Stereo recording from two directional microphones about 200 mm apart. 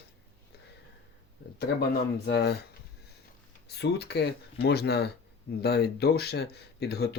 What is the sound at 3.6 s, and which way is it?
Speech, 55° left (ahead or behind).